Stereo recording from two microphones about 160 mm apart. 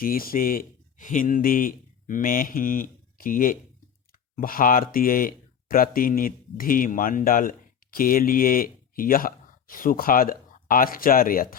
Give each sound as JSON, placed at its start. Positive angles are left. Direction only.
{"t": 0.0, "sound": "speech", "side_deg": 65}